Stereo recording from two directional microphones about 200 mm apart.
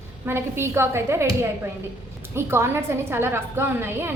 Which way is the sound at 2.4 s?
10° right (ahead or behind).